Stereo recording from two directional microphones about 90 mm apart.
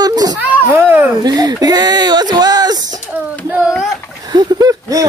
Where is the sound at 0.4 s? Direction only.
20° right (ahead or behind).